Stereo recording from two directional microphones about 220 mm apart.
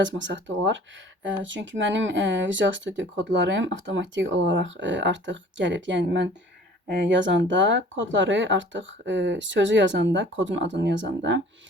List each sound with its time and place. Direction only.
0.0 s speech: 55° right (ahead or behind)